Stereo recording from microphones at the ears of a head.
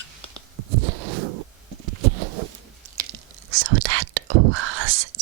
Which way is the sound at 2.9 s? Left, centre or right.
Right.